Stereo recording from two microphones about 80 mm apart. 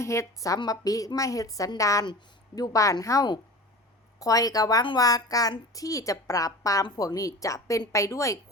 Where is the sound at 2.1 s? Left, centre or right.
Left.